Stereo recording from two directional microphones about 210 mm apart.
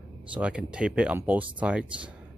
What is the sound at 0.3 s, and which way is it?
Speech, 5° right (ahead or behind).